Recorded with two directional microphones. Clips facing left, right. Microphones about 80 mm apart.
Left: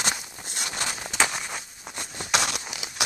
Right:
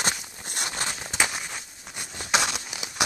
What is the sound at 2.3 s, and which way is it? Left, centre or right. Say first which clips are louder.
Crumpling: right 1 dB; centre.